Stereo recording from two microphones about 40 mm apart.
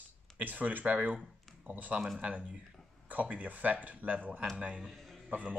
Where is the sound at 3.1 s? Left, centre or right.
Right.